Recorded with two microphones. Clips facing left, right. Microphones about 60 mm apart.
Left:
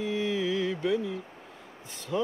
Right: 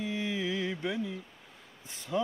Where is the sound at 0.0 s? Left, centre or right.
Centre.